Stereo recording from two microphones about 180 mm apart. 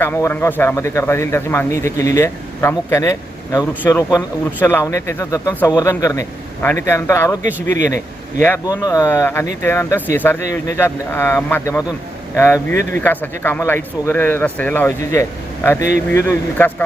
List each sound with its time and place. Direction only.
0.0 s speech: 10° left (ahead or behind)